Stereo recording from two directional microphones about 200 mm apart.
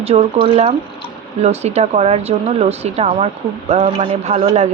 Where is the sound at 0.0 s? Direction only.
30° right (ahead or behind).